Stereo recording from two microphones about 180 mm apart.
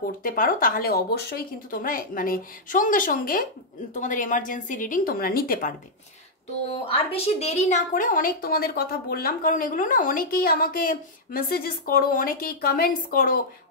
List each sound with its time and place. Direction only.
0.2 s a woman's voice: 50° left (ahead or behind)
6.7 s a woman's voice: 35° left (ahead or behind); by 13.4 s 55° left (ahead or behind)